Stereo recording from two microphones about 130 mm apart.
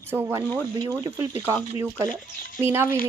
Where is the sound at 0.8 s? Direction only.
25° right (ahead or behind).